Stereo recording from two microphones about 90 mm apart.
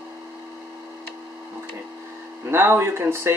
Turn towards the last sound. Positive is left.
turn(degrees=-25)  # may be behind; listen again after turning